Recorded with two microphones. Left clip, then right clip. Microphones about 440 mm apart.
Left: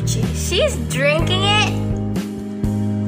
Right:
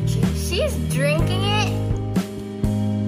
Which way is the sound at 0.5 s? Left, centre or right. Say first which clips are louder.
Left 6 dB; right.